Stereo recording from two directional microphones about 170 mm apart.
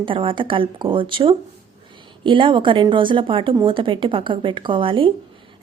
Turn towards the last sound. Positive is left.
turn(degrees=-30)  # may be behind; listen again after turning